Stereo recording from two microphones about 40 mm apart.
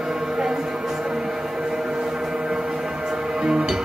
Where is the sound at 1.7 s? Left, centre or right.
Centre.